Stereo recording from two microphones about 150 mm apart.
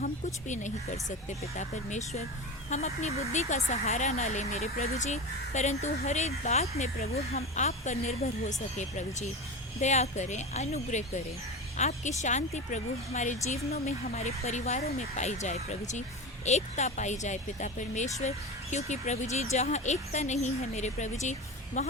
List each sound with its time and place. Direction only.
0.4 s speech: 55° left (ahead or behind)